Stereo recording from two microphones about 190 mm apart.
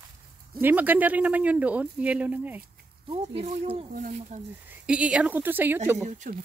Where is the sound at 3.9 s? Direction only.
45° right (ahead or behind).